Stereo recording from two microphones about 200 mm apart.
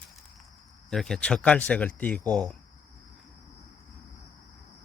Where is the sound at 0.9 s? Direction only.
Centre (ahead or behind).